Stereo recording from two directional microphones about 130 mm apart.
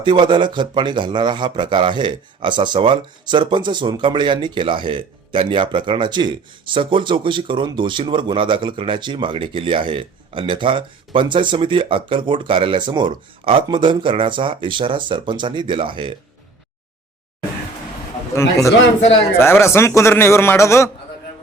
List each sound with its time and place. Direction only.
0.0 s speech: 35° right (ahead or behind)
19.4 s a man's voice: 20° left (ahead or behind)